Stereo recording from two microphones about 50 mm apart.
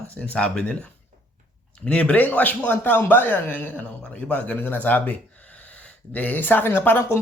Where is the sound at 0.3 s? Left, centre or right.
Left.